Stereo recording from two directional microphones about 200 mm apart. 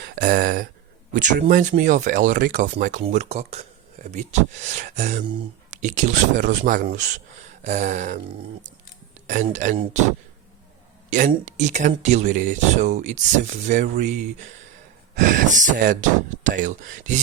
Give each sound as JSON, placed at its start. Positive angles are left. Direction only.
{"t": 0.0, "sound": "a sound", "side_deg": -40}
{"t": 1.1, "sound": "speech", "side_deg": -40}
{"t": 9.2, "sound": "speech", "side_deg": -35}
{"t": 11.4, "sound": "speech", "side_deg": -35}